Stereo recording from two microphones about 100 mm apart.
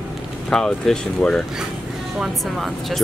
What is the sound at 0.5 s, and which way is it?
Speech, 5° left (ahead or behind).